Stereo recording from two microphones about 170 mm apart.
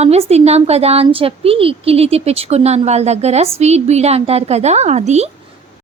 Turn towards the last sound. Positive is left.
turn(degrees=-40)  # may be behind; listen again after turning